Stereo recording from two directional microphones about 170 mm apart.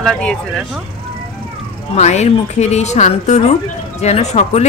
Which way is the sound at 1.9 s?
40° left (ahead or behind).